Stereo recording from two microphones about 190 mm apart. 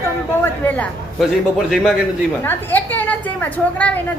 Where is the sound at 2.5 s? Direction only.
10° left (ahead or behind).